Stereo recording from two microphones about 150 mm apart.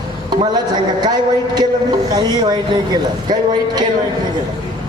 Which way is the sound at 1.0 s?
25° right (ahead or behind).